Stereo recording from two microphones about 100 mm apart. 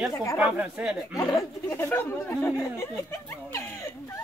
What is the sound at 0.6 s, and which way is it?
Speech, 10° right (ahead or behind).